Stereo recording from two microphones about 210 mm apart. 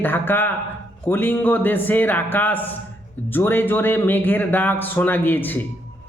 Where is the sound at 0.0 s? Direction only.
10° left (ahead or behind).